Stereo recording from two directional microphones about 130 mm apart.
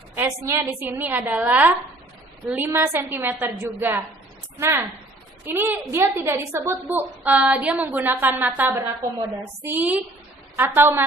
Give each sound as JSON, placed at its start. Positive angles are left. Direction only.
{"t": 0.1, "sound": "a woman's voice", "side_deg": -20}